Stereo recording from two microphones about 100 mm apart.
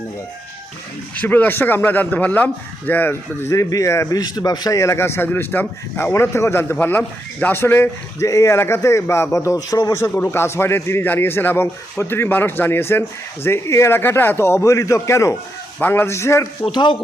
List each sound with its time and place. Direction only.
1.1 s speech: 15° left (ahead or behind)
4.2 s a man's voice: 40° left (ahead or behind)
16.7 s speech: 55° left (ahead or behind)